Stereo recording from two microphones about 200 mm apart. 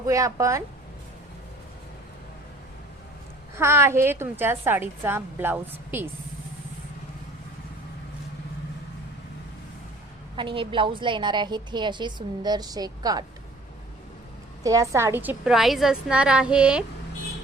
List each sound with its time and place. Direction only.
0.0 s a woman's voice: 15° right (ahead or behind)
3.5 s a woman's voice: 15° right (ahead or behind)
10.3 s a woman's voice: 25° right (ahead or behind)
14.6 s a woman's voice: 15° right (ahead or behind)